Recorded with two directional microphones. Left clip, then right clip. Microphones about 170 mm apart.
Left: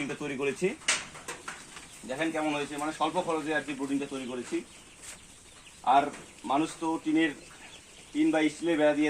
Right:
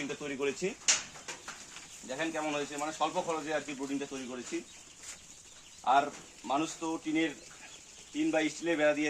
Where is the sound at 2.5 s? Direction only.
Centre (ahead or behind).